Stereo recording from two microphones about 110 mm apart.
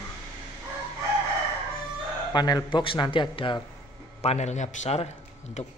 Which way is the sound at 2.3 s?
40° left (ahead or behind).